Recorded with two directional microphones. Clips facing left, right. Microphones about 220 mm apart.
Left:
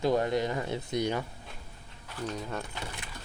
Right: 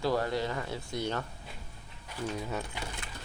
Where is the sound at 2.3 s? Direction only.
5° right (ahead or behind).